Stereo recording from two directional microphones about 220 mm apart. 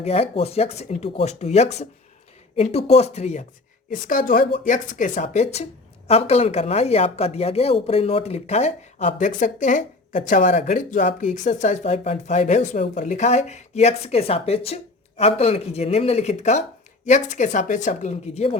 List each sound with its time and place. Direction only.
0.0 s a woman's voice: 30° left (ahead or behind)